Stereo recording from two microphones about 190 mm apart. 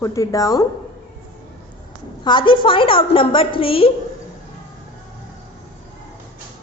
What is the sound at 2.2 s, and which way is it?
A woman's voice, 25° left (ahead or behind).